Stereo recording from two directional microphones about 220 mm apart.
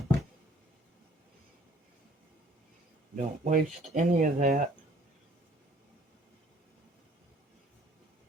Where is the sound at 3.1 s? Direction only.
35° right (ahead or behind).